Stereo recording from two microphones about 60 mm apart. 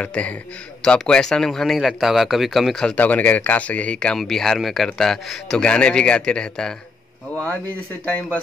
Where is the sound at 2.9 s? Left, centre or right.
Left.